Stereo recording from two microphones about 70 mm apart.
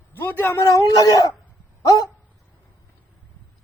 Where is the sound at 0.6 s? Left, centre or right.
Left.